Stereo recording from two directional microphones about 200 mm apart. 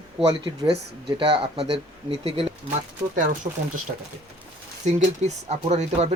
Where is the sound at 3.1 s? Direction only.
40° right (ahead or behind).